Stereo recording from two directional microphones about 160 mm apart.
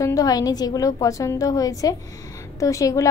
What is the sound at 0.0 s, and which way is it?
A woman's voice, 20° left (ahead or behind).